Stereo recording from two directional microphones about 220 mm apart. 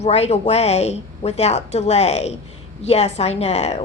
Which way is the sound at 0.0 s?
30° left (ahead or behind).